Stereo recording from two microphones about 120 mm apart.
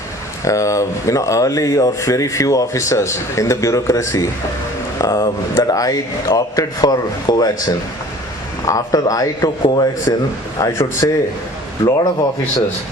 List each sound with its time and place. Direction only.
0.4 s speech: 25° left (ahead or behind)